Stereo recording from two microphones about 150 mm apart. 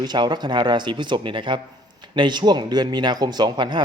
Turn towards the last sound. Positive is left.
turn(degrees=-30)  # may be behind; listen again after turning